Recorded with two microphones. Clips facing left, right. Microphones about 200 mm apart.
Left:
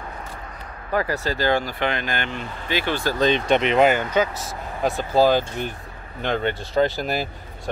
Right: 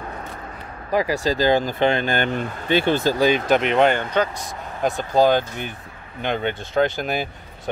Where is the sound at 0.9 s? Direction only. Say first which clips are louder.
Right 3 dB; 15° right (ahead or behind).